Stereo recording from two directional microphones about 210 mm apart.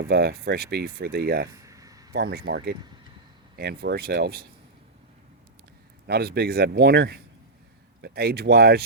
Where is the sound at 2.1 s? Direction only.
50° right (ahead or behind).